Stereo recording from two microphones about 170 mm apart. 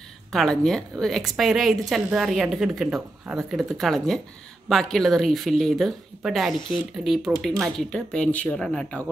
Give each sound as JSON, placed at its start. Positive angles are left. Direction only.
{"t": 0.3, "sound": "a woman's voice", "side_deg": 0}